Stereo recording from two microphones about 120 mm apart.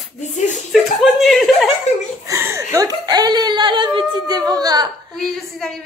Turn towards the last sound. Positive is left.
turn(degrees=5)  # may be behind; listen again after turning